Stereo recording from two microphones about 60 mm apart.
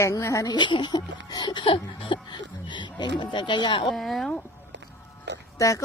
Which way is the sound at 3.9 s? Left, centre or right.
Centre.